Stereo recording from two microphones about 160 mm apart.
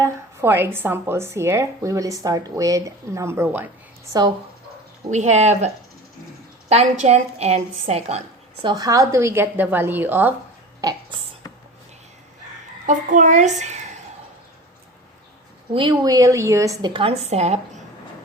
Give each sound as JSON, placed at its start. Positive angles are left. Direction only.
{"t": 0.0, "sound": "a woman's voice", "side_deg": -15}
{"t": 5.0, "sound": "a child's voice", "side_deg": -45}
{"t": 8.6, "sound": "a woman's voice", "side_deg": -25}
{"t": 12.8, "sound": "a child's voice", "side_deg": -50}
{"t": 15.7, "sound": "a woman's voice", "side_deg": -30}